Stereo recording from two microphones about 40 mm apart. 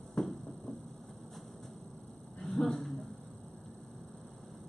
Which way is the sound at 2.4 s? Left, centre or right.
Centre.